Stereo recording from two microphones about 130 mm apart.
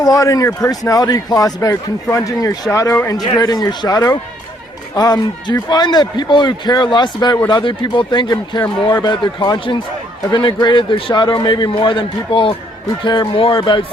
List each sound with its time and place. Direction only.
0.0 s a man's voice: 25° left (ahead or behind)